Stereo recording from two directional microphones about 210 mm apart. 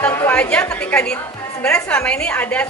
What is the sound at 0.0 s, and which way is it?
A woman's voice, 10° left (ahead or behind).